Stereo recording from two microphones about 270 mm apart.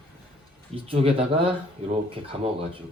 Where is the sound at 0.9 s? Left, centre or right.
Centre.